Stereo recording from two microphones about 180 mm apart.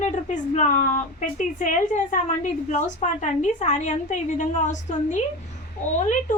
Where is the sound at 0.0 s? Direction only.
40° left (ahead or behind).